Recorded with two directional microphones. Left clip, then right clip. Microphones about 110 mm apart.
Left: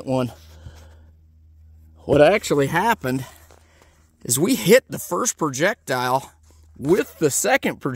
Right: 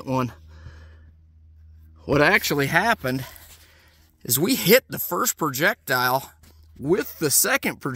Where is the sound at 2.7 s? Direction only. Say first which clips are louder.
Left 1 dB; 25° left (ahead or behind).